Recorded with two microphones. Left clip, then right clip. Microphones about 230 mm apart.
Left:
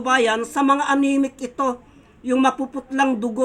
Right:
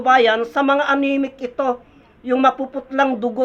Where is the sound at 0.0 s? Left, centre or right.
Centre.